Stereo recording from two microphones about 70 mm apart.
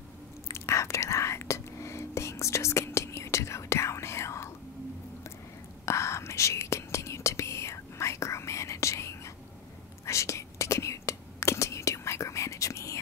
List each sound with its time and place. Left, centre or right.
0.5 s whispering: left
5.9 s whispering: left